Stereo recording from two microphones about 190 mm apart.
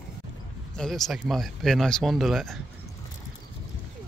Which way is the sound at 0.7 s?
Centre (ahead or behind).